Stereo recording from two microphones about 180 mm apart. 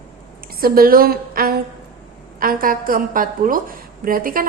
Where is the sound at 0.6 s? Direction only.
55° right (ahead or behind).